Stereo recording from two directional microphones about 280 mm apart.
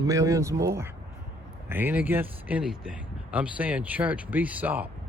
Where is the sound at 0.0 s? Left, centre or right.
Centre.